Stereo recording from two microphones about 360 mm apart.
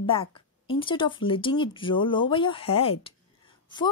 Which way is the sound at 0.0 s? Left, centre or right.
Centre.